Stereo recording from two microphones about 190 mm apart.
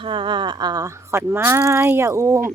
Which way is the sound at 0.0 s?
25° right (ahead or behind).